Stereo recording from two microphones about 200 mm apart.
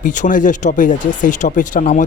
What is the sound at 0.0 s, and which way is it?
Speech, 40° left (ahead or behind).